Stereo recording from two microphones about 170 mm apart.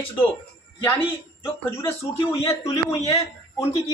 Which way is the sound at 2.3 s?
15° left (ahead or behind).